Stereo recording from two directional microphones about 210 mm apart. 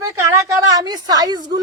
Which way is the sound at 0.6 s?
15° right (ahead or behind).